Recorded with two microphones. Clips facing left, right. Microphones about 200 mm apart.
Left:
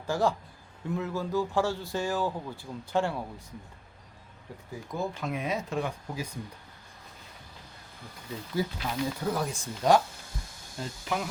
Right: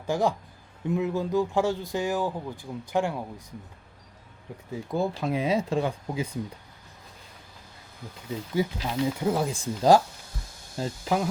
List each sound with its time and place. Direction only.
0.1 s speech: 15° right (ahead or behind)
4.7 s speech: 30° right (ahead or behind)
8.5 s speech: 20° right (ahead or behind); by 11.3 s 35° right (ahead or behind)